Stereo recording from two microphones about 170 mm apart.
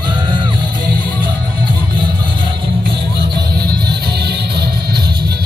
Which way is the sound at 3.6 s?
65° right (ahead or behind).